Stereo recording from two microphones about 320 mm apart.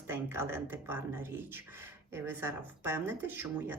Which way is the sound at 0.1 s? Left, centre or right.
Centre.